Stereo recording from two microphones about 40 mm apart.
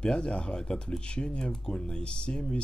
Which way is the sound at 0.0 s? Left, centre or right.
Left.